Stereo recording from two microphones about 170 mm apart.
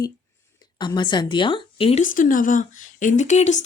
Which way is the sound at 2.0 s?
55° left (ahead or behind).